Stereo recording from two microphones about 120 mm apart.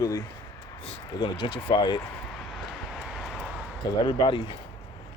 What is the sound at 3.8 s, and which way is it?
Speech, 40° left (ahead or behind).